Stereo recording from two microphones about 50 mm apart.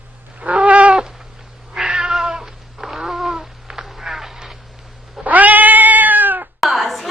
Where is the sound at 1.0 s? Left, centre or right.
Centre.